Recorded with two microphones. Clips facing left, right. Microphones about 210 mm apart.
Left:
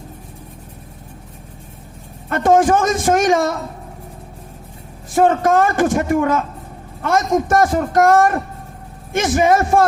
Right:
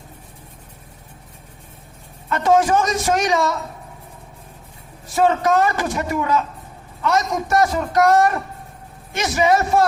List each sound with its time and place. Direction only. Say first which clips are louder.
2.3 s a woman's voice: left 3 dB; 50° left (ahead or behind)
5.0 s a woman's voice: left 3 dB; 50° left (ahead or behind)